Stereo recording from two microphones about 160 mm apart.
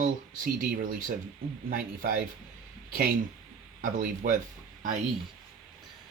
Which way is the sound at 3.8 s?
55° right (ahead or behind).